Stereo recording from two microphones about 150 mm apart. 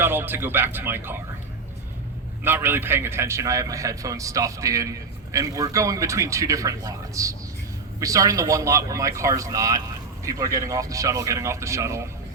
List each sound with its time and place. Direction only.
0.0 s speech: 15° right (ahead or behind)
2.4 s a man's voice: 15° right (ahead or behind)